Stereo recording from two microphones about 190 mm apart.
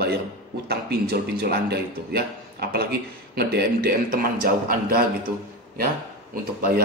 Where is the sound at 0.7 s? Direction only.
55° right (ahead or behind).